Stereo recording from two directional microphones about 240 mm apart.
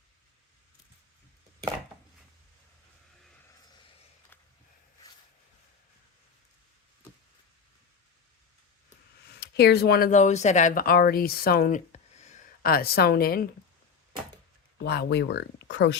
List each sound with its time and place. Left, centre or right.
9.2 s speech: left
14.8 s speech: left